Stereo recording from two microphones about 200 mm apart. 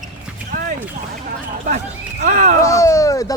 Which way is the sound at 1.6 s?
35° right (ahead or behind).